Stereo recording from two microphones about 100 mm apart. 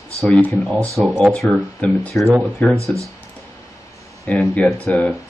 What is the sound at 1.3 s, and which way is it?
Speech, 5° left (ahead or behind).